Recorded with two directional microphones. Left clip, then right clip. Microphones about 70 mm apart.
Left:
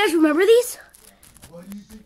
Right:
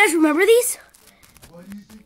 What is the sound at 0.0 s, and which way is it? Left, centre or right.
Speech, right.